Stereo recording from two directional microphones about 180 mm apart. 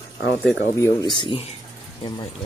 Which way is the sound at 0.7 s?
20° left (ahead or behind).